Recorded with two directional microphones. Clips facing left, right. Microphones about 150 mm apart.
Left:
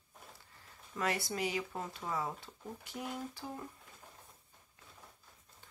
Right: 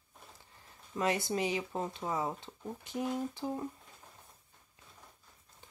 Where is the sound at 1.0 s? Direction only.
20° right (ahead or behind).